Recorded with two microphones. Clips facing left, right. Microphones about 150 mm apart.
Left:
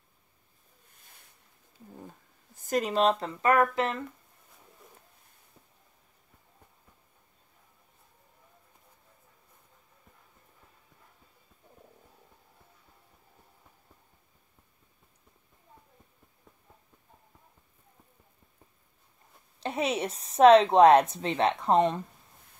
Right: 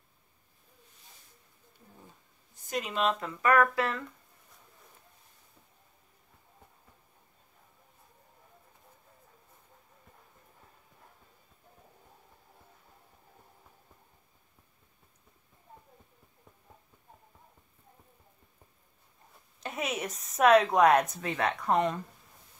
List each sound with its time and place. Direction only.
2.6 s speech: 40° left (ahead or behind); by 4.0 s 20° left (ahead or behind)
19.6 s a woman's voice: 30° left (ahead or behind)